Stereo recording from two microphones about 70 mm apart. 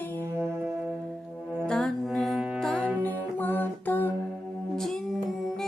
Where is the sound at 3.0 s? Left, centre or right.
Left.